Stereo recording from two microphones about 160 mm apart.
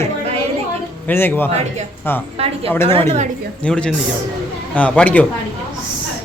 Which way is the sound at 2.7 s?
15° left (ahead or behind).